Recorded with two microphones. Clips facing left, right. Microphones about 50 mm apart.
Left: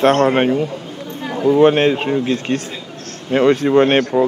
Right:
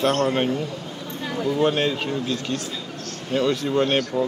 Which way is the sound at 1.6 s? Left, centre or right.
Left.